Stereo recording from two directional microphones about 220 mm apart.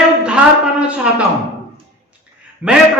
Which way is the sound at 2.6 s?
5° right (ahead or behind).